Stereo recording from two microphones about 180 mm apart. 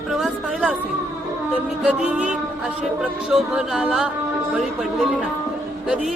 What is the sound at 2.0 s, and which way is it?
Speech, 5° right (ahead or behind).